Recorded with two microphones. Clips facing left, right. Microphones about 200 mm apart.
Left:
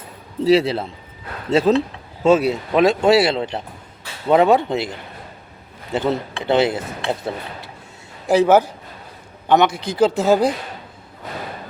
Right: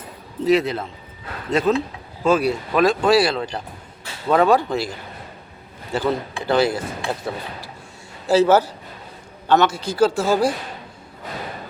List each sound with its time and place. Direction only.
0.4 s speech: 30° left (ahead or behind)
8.3 s speech: 15° left (ahead or behind)